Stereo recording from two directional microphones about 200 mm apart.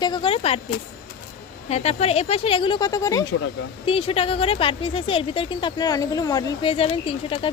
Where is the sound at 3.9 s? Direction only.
30° left (ahead or behind).